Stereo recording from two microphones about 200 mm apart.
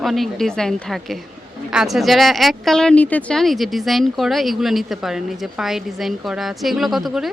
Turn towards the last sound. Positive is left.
turn(degrees=0)  # may be behind; listen again after turning